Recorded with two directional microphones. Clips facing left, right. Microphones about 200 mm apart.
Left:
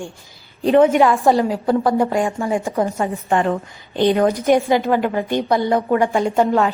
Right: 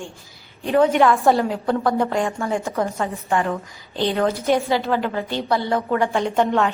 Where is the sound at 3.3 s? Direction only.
30° left (ahead or behind).